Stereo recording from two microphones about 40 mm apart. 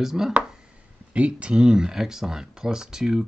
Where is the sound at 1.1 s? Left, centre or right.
Right.